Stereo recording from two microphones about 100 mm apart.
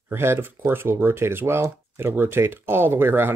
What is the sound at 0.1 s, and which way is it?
Speech, 25° right (ahead or behind).